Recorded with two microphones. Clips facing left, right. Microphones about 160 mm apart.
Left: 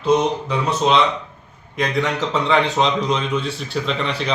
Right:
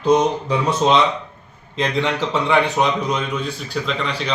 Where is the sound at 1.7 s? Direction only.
20° right (ahead or behind).